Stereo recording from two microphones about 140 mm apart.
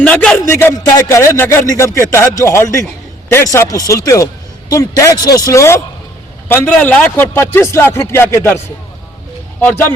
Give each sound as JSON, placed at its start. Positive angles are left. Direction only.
{"t": 0.0, "sound": "speech", "side_deg": 10}